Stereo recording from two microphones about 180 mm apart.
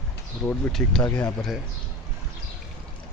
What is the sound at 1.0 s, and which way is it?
Speech, 15° left (ahead or behind).